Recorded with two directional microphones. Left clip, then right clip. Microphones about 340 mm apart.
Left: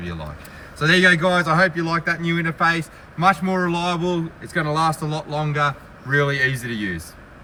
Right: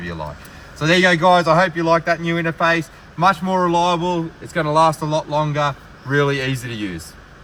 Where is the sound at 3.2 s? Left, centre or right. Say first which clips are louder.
Right 2 dB; centre.